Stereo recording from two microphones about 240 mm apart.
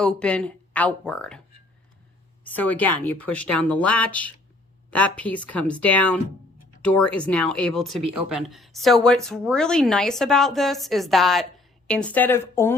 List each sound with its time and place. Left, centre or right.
0.0 s speech: centre
2.4 s speech: centre